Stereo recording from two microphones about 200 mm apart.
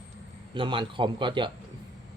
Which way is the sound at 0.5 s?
25° right (ahead or behind).